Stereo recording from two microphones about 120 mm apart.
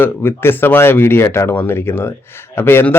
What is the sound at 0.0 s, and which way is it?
Speech, 20° left (ahead or behind).